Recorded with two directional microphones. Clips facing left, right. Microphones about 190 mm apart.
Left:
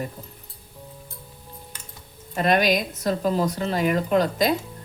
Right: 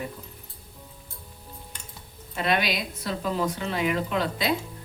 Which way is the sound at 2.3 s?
45° left (ahead or behind).